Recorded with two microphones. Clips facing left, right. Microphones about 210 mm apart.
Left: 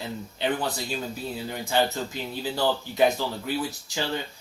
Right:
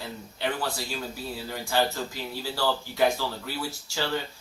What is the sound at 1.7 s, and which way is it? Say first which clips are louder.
Speech: left 1 dB; 20° left (ahead or behind).